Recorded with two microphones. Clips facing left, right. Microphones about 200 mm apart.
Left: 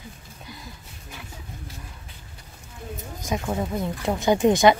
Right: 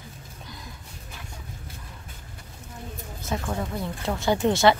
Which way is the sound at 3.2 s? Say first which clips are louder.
Left 3 dB; 15° left (ahead or behind).